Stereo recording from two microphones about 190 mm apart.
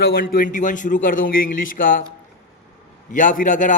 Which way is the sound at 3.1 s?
45° left (ahead or behind).